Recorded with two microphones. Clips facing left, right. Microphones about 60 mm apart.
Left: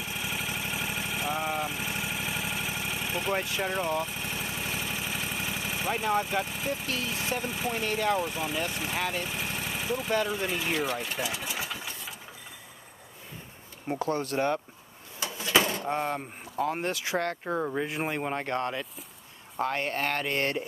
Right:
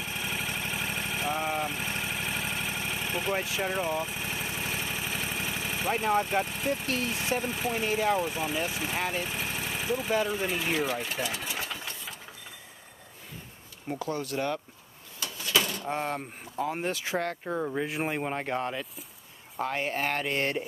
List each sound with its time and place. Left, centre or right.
0.0 s vehicle: centre
6.4 s speech: centre
13.9 s speech: left
15.1 s a sound: left
16.1 s speech: centre
17.7 s speech: centre